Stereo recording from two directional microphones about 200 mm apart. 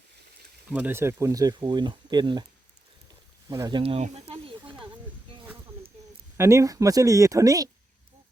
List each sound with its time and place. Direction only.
0.7 s speech: 10° right (ahead or behind)
3.5 s snake: 20° right (ahead or behind)
6.3 s speech: 15° right (ahead or behind)